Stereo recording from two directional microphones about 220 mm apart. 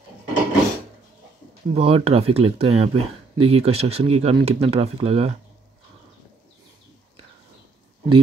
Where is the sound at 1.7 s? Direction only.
25° right (ahead or behind).